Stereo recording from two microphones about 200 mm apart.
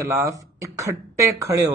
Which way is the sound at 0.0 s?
15° right (ahead or behind).